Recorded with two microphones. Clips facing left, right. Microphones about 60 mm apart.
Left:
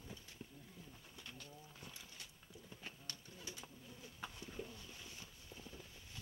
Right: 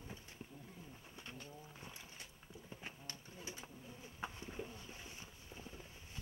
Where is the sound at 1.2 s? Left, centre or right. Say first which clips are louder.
Right 3 dB; right.